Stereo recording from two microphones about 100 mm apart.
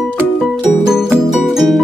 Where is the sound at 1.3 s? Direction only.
Centre (ahead or behind).